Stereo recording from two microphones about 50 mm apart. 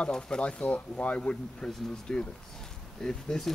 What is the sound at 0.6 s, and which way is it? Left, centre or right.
Speech, left.